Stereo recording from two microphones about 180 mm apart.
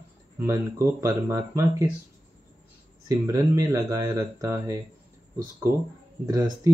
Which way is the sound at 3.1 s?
15° right (ahead or behind).